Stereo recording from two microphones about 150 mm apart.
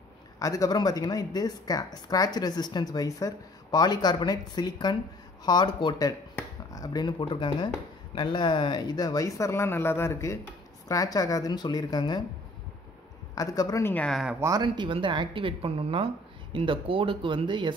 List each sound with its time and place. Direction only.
0.4 s speech: 25° left (ahead or behind)
13.3 s speech: 25° left (ahead or behind)
13.9 s speech: 5° left (ahead or behind)
14.4 s speech: 25° right (ahead or behind)